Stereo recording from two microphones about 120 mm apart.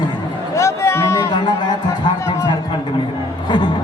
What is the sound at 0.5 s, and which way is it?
Music, 25° left (ahead or behind).